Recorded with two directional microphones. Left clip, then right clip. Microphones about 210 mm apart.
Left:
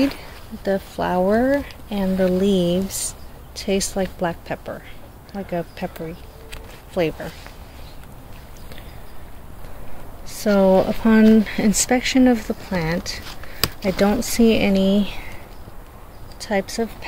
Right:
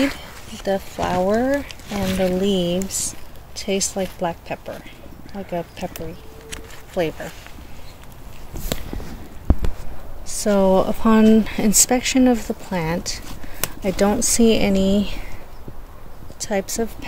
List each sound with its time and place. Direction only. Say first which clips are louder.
0.7 s speech: even; centre (ahead or behind)
10.2 s speech: left 1 dB; 10° right (ahead or behind)
16.3 s speech: even; 15° right (ahead or behind)